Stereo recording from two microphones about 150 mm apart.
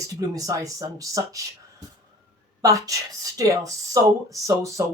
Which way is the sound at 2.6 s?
20° right (ahead or behind).